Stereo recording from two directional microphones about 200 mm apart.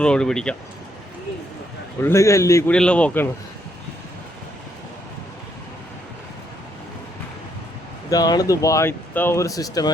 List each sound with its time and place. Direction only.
0.0 s speech: 5° left (ahead or behind)
2.0 s speech: 15° left (ahead or behind)
8.1 s speech: 20° left (ahead or behind)